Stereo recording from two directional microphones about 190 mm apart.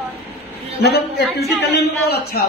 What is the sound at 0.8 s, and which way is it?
A man's voice, 60° left (ahead or behind).